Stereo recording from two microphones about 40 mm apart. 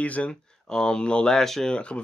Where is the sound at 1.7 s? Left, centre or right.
Left.